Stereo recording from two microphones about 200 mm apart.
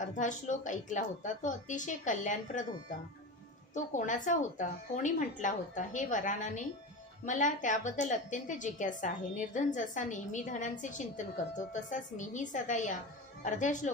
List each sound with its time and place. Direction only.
0.0 s a woman's voice: 40° left (ahead or behind)
3.7 s a woman's voice: 40° left (ahead or behind)